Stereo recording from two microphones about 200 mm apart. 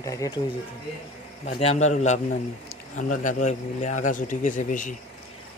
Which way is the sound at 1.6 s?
35° left (ahead or behind).